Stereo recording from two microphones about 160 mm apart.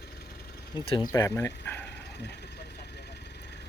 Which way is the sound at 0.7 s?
25° left (ahead or behind).